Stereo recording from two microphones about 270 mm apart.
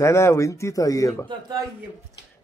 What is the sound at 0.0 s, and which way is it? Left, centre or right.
Speech, centre.